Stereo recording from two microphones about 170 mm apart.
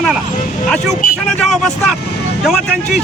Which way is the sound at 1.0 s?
50° left (ahead or behind).